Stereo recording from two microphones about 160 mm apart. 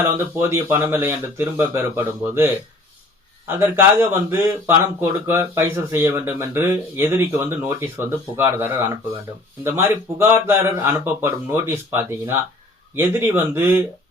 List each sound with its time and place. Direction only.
0.3 s speech: 15° right (ahead or behind)